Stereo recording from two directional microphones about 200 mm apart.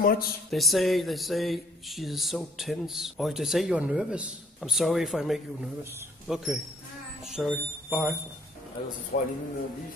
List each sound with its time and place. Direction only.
0.0 s speech: 50° left (ahead or behind)
0.5 s speech: centre (ahead or behind)
9.1 s a man's voice: 40° left (ahead or behind)